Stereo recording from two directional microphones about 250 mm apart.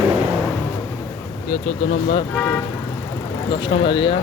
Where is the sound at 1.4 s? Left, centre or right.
Left.